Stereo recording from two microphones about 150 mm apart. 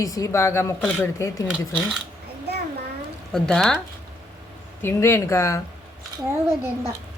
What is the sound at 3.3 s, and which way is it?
Speech, 5° left (ahead or behind).